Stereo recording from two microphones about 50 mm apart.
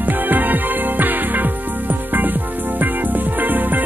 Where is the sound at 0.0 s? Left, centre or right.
Right.